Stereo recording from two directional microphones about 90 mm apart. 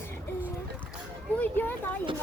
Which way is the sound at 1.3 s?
20° left (ahead or behind).